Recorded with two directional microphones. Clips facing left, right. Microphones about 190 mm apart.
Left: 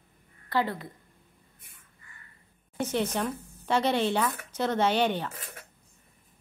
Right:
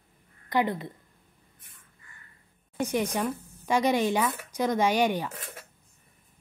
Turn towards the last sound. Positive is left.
turn(degrees=-10)  # may be behind; listen again after turning